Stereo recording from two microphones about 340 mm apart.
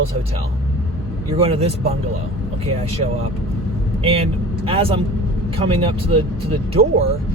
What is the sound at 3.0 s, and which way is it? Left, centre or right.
Speech, right.